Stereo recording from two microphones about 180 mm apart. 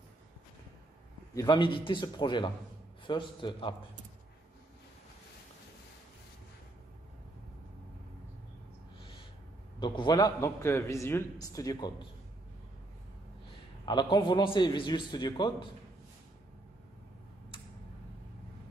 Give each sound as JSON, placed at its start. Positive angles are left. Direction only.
{"t": 1.3, "sound": "a man's voice", "side_deg": 20}
{"t": 9.8, "sound": "a man's voice", "side_deg": 25}
{"t": 13.8, "sound": "a man's voice", "side_deg": 25}